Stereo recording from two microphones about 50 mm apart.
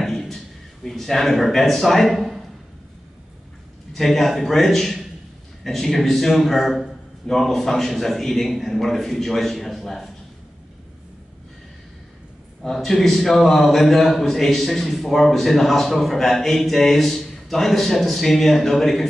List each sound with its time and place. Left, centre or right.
0.0 s a sound: centre
0.8 s a man's voice: centre
3.9 s a man's voice: centre
12.6 s a man's voice: centre